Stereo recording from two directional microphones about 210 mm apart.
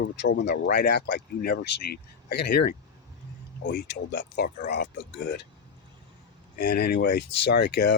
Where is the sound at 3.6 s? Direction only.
50° left (ahead or behind).